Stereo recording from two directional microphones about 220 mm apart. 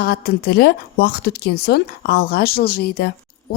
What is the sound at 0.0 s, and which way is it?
A woman's voice, 45° left (ahead or behind).